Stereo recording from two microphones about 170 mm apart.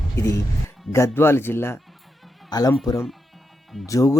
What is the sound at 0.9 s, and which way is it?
A man's voice, 15° left (ahead or behind).